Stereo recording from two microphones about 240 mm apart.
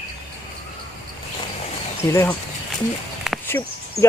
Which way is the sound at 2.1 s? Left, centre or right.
Centre.